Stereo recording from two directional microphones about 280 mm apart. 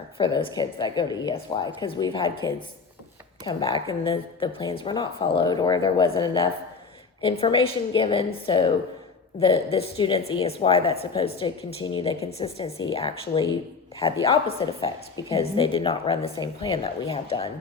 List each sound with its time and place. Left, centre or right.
0.2 s a woman's voice: centre
3.4 s a woman's voice: centre